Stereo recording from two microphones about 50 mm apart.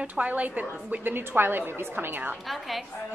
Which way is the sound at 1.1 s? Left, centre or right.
Right.